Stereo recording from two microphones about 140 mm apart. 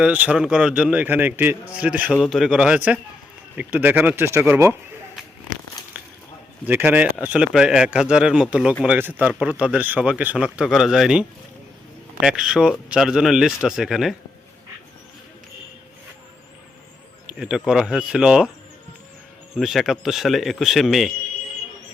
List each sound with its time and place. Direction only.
0.0 s speech: 10° right (ahead or behind)
6.7 s speech: 15° right (ahead or behind)
17.2 s speech: 5° right (ahead or behind)
19.5 s speech: centre (ahead or behind)